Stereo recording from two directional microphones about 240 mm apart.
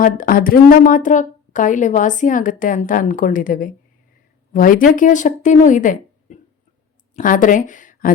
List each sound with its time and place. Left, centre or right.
0.0 s a woman's voice: left